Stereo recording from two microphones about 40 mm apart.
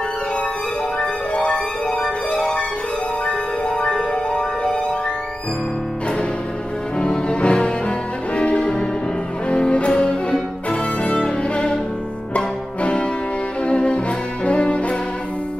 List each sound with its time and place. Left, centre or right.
0.9 s music: left
3.3 s music: left
7.0 s music: left
9.5 s cello: left
11.1 s music: left